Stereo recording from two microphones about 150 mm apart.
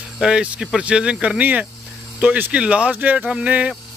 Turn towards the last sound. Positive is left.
turn(degrees=-10)  # may be behind; listen again after turning